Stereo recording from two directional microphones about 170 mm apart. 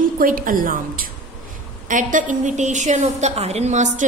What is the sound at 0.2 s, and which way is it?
A woman's voice, 55° right (ahead or behind).